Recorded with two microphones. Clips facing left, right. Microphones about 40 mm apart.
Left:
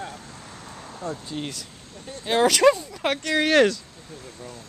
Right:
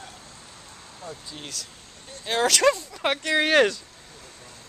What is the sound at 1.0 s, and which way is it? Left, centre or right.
Speech, left.